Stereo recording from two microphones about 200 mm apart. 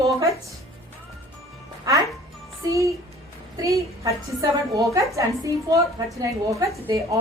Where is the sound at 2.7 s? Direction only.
15° right (ahead or behind).